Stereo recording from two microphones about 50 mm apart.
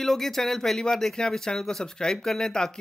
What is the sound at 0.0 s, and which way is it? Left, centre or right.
Speech, centre.